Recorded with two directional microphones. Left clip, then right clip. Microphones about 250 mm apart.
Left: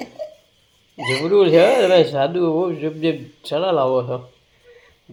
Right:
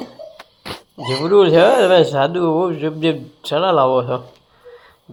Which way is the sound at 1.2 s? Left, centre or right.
Centre.